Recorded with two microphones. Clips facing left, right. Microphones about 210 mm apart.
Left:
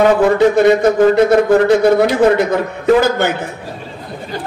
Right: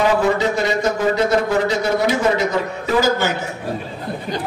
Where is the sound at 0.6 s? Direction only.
55° left (ahead or behind).